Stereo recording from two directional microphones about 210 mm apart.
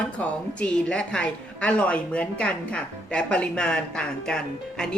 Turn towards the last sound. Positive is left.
turn(degrees=5)  # may be behind; listen again after turning